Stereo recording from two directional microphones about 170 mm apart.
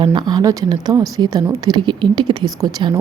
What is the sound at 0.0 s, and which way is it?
Speech, 25° right (ahead or behind).